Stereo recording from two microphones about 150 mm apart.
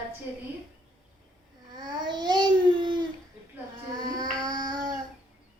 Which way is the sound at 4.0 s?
25° right (ahead or behind).